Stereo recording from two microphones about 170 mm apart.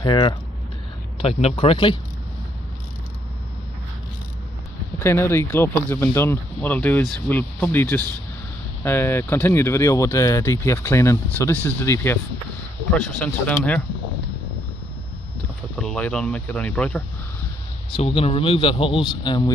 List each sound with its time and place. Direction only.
0.0 s speech: 25° left (ahead or behind)
4.9 s speech: 15° left (ahead or behind)
15.7 s speech: 5° left (ahead or behind)
17.9 s speech: 35° left (ahead or behind)